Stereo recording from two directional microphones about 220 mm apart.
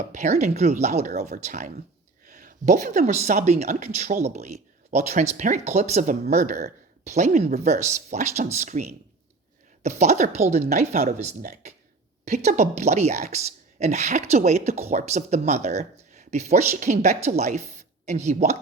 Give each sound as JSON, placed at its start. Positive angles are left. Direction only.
{"t": 0.1, "sound": "speech", "side_deg": -30}